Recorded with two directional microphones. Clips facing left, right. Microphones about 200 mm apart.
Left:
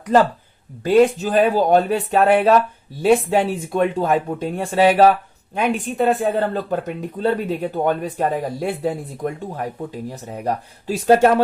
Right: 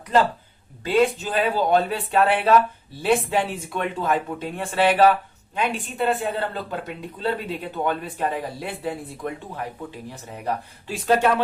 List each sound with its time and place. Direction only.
0.9 s speech: 45° left (ahead or behind)